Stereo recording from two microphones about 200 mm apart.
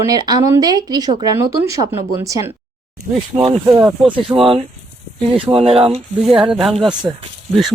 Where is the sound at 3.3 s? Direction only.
25° right (ahead or behind).